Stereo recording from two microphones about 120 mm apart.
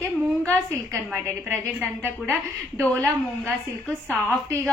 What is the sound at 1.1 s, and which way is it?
A woman's voice, 25° right (ahead or behind).